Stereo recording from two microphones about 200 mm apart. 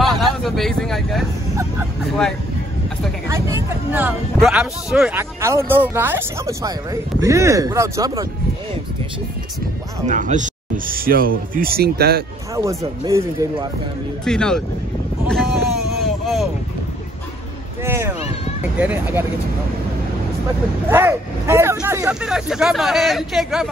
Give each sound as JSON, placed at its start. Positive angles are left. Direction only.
{"t": 0.0, "sound": "vehicle", "side_deg": 0}
{"t": 3.3, "sound": "speech", "side_deg": -15}
{"t": 10.0, "sound": "speech", "side_deg": -40}
{"t": 12.5, "sound": "speech", "side_deg": -15}
{"t": 14.2, "sound": "speech", "side_deg": 5}
{"t": 15.2, "sound": "a sound", "side_deg": 0}
{"t": 17.8, "sound": "speech", "side_deg": -10}
{"t": 20.9, "sound": "speech", "side_deg": -10}